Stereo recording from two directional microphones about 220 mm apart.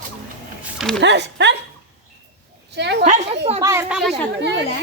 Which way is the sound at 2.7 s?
50° right (ahead or behind).